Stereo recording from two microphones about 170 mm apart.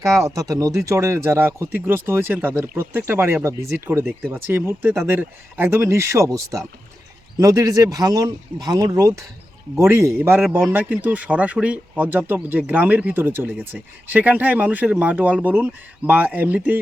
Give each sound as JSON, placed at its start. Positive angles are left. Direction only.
{"t": 0.0, "sound": "speech", "side_deg": -20}